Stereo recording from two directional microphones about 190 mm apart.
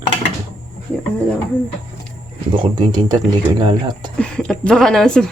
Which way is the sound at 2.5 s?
25° right (ahead or behind).